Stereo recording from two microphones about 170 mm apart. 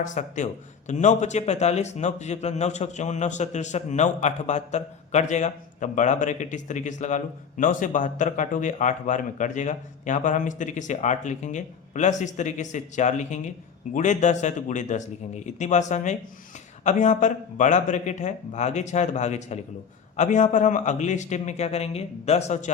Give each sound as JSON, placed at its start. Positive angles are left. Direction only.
{"t": 0.0, "sound": "a man's voice", "side_deg": 45}